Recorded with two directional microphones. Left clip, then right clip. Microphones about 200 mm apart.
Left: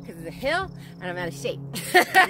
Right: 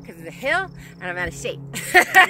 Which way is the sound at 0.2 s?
15° left (ahead or behind).